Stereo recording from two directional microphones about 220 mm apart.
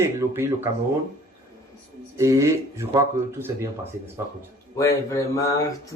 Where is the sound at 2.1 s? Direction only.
15° right (ahead or behind).